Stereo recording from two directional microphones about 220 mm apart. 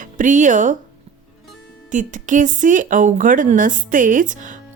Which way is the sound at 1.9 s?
35° right (ahead or behind).